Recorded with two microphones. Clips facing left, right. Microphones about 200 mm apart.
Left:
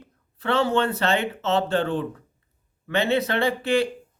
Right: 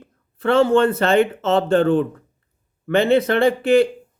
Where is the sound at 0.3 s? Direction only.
50° right (ahead or behind).